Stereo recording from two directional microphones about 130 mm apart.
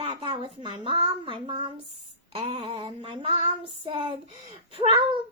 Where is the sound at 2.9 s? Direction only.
40° right (ahead or behind).